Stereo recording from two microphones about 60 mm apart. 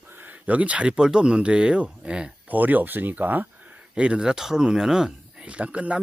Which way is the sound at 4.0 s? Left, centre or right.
Centre.